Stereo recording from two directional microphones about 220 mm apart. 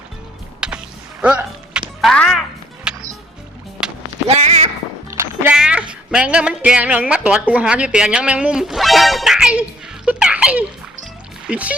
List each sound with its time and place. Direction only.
0.6 s music: 5° right (ahead or behind)
4.3 s a sound: 30° right (ahead or behind)
5.1 s music: 10° right (ahead or behind)
5.9 s speech: 5° right (ahead or behind)
10.1 s music: 5° right (ahead or behind)
11.4 s speech: 5° right (ahead or behind)